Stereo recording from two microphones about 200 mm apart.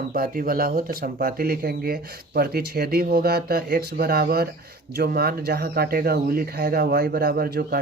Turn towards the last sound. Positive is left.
turn(degrees=-50)  # may be behind; listen again after turning